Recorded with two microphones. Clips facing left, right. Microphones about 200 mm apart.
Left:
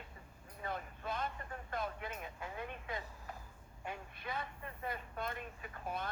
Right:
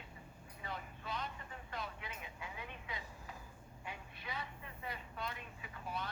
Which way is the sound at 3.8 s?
50° left (ahead or behind).